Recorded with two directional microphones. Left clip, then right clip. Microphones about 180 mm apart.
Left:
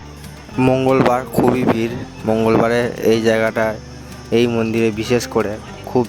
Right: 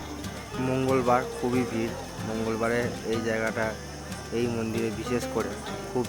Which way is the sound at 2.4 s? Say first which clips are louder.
Left 11 dB; 70° left (ahead or behind).